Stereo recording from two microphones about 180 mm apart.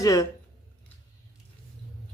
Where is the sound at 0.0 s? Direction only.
20° left (ahead or behind).